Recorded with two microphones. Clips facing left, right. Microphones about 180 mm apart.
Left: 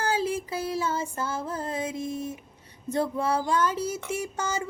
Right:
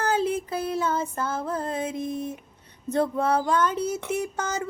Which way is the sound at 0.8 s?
55° right (ahead or behind).